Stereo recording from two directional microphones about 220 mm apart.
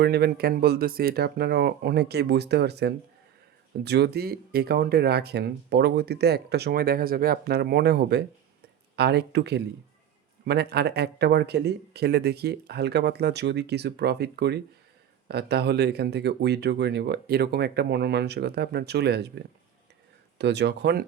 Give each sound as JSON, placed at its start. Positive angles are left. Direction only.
{"t": 0.0, "sound": "speech", "side_deg": -45}